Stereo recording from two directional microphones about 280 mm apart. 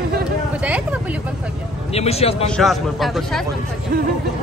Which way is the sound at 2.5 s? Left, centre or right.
Centre.